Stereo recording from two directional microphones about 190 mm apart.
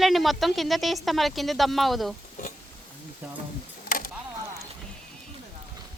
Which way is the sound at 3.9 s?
50° left (ahead or behind).